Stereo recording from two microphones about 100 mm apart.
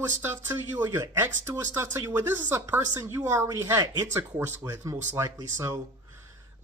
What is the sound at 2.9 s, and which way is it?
Speech, 30° right (ahead or behind).